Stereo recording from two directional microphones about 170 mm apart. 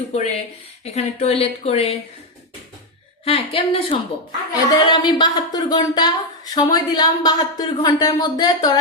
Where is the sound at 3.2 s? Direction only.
35° left (ahead or behind).